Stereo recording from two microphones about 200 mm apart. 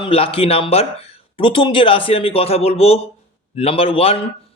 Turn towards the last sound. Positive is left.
turn(degrees=30)  # may be behind; listen again after turning